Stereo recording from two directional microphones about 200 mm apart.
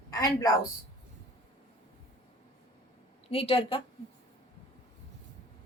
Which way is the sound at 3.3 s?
30° left (ahead or behind).